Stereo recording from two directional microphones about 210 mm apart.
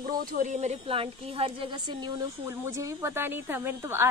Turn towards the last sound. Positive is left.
turn(degrees=-10)  # may be behind; listen again after turning